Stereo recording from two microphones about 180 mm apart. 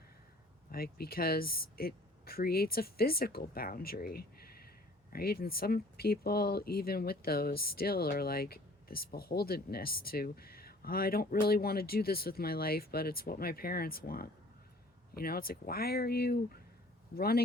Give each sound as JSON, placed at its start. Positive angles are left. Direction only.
{"t": 0.7, "sound": "speech", "side_deg": 60}